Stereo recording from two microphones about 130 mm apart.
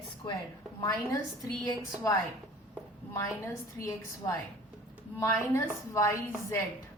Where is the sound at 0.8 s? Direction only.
25° left (ahead or behind).